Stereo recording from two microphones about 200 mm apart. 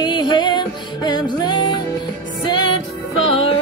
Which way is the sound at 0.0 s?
20° left (ahead or behind).